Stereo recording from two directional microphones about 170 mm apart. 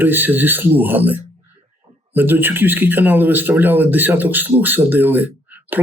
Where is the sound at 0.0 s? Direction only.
10° right (ahead or behind).